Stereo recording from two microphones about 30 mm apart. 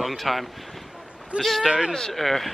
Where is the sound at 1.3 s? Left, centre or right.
Right.